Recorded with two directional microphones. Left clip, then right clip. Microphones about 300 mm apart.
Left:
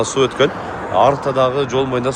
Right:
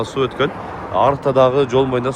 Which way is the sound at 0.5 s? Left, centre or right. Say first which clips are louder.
Left 3 dB; left.